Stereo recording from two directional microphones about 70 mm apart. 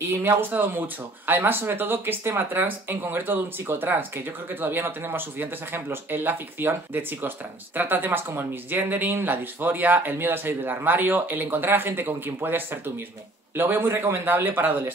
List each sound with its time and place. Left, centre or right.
0.1 s speech: right